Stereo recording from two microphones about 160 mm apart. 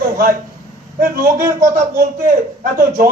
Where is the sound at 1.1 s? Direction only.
65° right (ahead or behind).